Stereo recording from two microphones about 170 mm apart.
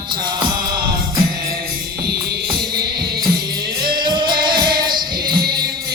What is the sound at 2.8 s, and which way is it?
Music, 25° right (ahead or behind).